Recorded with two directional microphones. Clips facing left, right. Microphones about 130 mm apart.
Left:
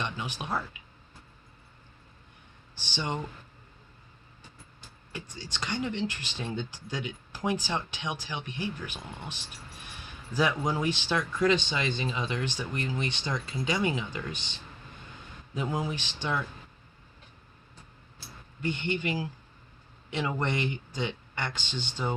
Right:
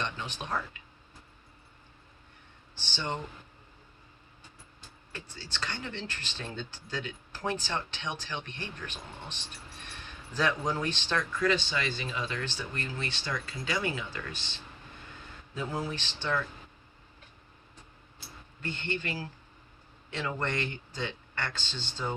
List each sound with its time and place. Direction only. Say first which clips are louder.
0.0 s speech: left 1 dB; 10° left (ahead or behind)
2.7 s speech: left 2 dB; 15° left (ahead or behind)
5.1 s speech: left 3 dB; 15° left (ahead or behind)
15.5 s speech: left 3 dB; 15° left (ahead or behind)
18.6 s speech: left 5 dB; 15° left (ahead or behind)